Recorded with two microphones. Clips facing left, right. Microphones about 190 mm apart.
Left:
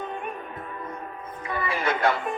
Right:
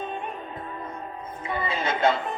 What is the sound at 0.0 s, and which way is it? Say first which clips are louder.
Music: right 1 dB; 20° right (ahead or behind).